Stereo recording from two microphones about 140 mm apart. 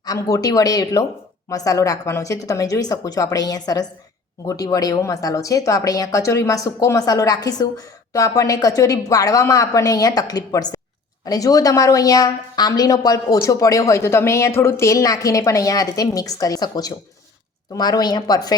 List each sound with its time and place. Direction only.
0.0 s a woman's voice: 25° left (ahead or behind)